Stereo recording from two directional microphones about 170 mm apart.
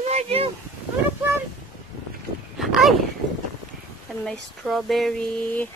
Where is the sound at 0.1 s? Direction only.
35° right (ahead or behind).